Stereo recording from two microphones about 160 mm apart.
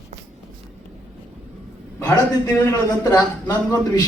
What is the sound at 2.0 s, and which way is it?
A man's voice, 15° left (ahead or behind).